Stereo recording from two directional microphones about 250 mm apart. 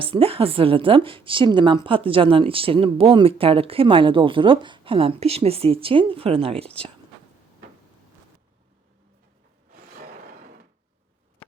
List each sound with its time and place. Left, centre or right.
0.0 s a woman's voice: right